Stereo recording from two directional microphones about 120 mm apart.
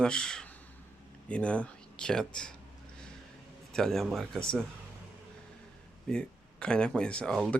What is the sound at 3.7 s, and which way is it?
Speech, centre (ahead or behind).